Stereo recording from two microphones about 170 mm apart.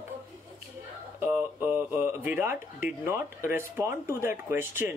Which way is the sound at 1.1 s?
10° right (ahead or behind).